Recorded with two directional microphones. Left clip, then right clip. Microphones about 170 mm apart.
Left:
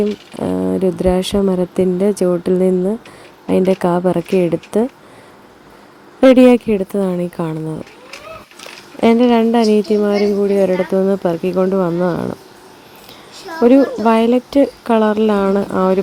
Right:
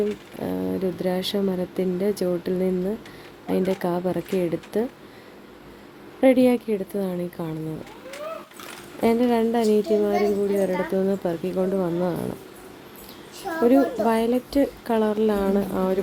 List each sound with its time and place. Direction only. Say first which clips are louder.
0.3 s speech: left 12 dB; 35° left (ahead or behind)
6.1 s speech: left 10 dB; 35° left (ahead or behind)
9.0 s a woman's voice: left 9 dB; 30° left (ahead or behind)
13.6 s a woman's voice: left 8 dB; 25° left (ahead or behind)